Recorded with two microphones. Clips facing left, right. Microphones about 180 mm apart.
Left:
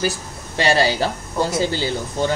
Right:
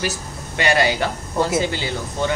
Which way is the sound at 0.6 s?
30° left (ahead or behind).